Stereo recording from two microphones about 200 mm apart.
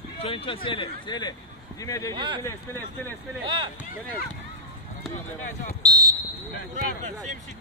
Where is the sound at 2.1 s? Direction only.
25° right (ahead or behind).